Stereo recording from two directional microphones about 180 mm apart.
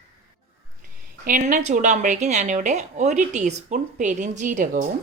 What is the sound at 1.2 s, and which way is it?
Speech, 45° right (ahead or behind).